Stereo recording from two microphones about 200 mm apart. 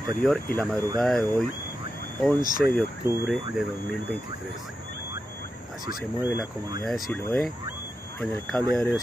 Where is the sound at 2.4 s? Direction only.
45° left (ahead or behind).